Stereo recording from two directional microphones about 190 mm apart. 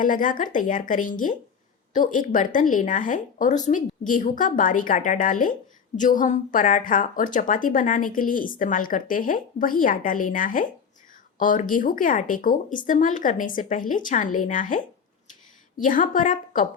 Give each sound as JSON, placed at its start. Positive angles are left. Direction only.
{"t": 0.0, "sound": "a woman's voice", "side_deg": 45}